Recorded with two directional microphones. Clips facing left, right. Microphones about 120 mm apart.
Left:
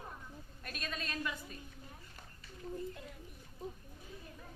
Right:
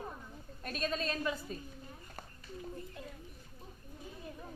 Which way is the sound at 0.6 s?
35° right (ahead or behind).